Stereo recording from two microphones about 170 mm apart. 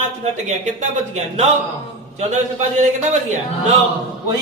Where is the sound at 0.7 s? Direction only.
45° right (ahead or behind).